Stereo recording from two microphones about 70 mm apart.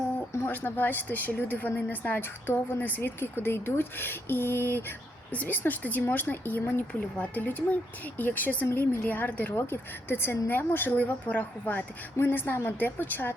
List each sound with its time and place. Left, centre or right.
0.4 s a woman's voice: left